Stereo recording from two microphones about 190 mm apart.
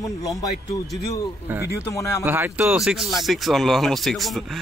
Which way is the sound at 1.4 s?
10° right (ahead or behind).